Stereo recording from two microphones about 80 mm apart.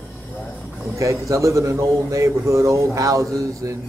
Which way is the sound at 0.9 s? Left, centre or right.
Right.